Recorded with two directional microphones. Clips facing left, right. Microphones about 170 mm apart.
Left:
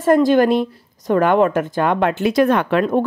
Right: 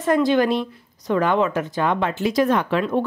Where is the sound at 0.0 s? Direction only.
50° left (ahead or behind).